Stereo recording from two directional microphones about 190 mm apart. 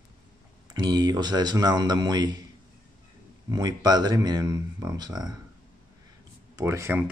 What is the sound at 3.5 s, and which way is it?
Speech, 20° right (ahead or behind).